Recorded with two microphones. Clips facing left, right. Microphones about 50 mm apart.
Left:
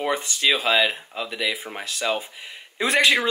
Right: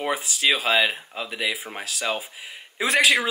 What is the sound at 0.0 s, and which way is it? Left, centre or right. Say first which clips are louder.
Speech: left 1 dB; centre.